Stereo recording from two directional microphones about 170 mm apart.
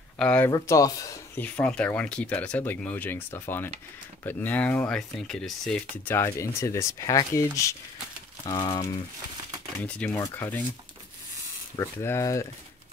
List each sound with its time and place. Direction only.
0.2 s speech: 5° left (ahead or behind)
0.5 s speech: 20° left (ahead or behind)
8.5 s speech: 25° left (ahead or behind)
9.8 s speech: 5° left (ahead or behind)
11.7 s speech: 15° left (ahead or behind)